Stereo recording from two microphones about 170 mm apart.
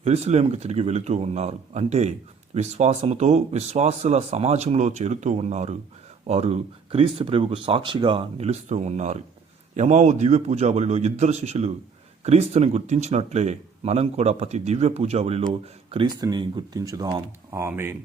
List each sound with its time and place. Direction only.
0.0 s speech: 40° right (ahead or behind); by 17.9 s 15° right (ahead or behind)